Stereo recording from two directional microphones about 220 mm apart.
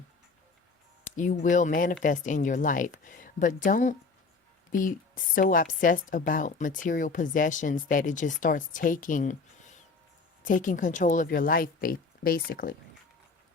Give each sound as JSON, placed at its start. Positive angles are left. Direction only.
{"t": 1.1, "sound": "speech", "side_deg": 35}
{"t": 10.4, "sound": "speech", "side_deg": 35}